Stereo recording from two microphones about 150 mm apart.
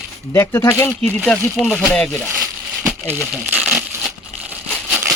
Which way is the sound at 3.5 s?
5° right (ahead or behind).